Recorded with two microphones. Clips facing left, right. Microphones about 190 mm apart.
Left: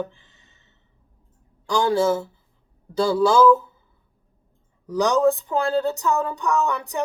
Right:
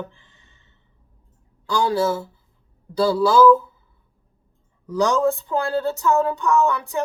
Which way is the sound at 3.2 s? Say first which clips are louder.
Right 1 dB; 20° left (ahead or behind).